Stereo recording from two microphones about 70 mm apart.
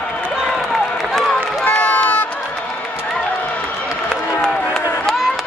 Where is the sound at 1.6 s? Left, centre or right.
Left.